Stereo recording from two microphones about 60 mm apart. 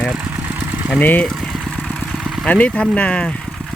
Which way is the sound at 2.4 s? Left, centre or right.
Left.